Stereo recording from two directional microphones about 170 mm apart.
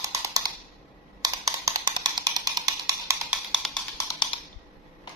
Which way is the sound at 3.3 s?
Centre (ahead or behind).